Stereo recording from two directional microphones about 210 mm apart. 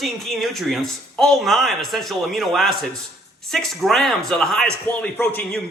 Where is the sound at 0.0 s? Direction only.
Centre (ahead or behind).